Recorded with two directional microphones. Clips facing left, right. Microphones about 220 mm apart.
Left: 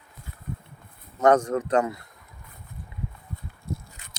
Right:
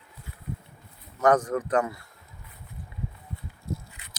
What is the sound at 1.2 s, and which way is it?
Speech, 25° left (ahead or behind).